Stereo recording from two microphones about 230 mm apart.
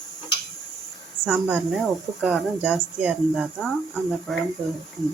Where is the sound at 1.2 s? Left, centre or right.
Centre.